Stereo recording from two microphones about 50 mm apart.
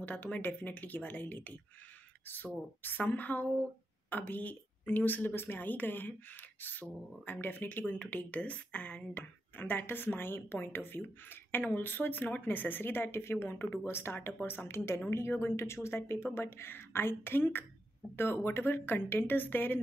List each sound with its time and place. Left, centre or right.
0.0 s speech: left
9.1 s speech: left